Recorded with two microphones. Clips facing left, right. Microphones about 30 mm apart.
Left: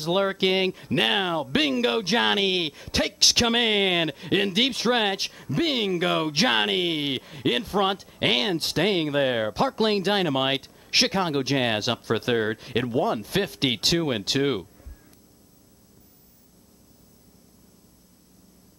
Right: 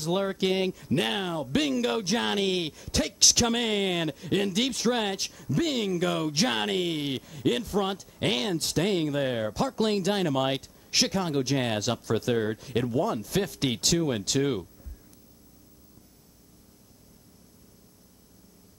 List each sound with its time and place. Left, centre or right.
0.0 s speech: left